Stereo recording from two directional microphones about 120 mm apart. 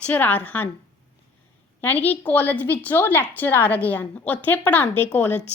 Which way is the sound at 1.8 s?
15° left (ahead or behind).